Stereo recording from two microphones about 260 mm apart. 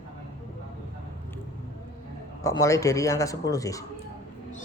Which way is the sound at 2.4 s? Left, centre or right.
Centre.